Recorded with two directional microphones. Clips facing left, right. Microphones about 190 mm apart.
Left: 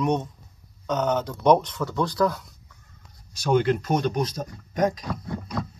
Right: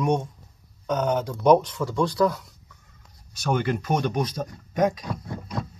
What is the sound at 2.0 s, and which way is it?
Speech, 30° right (ahead or behind).